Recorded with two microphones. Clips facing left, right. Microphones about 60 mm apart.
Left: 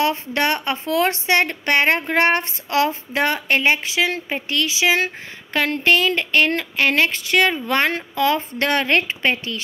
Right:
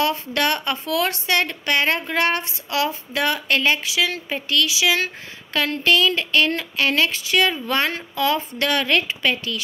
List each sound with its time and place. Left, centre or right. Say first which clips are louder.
0.0 s speech: left 1 dB; left